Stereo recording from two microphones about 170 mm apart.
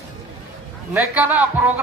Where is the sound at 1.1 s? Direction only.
10° right (ahead or behind).